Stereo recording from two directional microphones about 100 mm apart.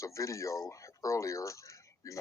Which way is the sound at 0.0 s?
30° left (ahead or behind).